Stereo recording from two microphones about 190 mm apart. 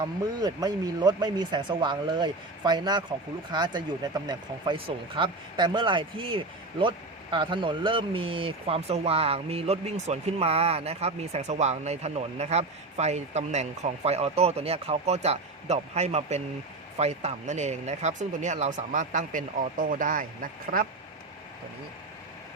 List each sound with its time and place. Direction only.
0.0 s speech: 20° right (ahead or behind); by 20.8 s 45° right (ahead or behind)